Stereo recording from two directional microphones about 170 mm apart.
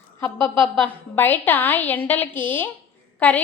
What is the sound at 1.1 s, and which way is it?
A woman's voice, 10° left (ahead or behind).